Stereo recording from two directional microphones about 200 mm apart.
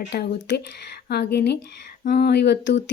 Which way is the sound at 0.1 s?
55° left (ahead or behind).